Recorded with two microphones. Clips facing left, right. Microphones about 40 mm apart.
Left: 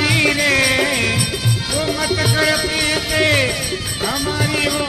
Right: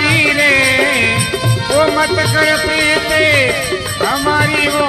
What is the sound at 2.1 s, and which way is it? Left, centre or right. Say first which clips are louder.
Music: right 4 dB; centre.